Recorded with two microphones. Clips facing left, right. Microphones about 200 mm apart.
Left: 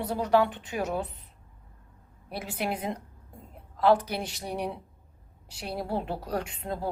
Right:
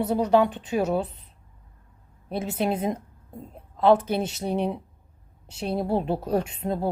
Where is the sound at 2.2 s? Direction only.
25° right (ahead or behind).